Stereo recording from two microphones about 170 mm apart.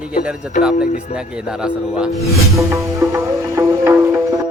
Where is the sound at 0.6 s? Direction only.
5° right (ahead or behind).